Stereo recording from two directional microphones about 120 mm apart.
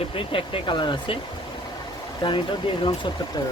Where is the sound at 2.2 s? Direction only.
40° left (ahead or behind).